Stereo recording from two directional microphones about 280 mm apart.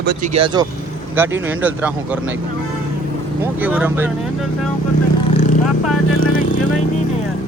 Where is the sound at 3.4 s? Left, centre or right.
Centre.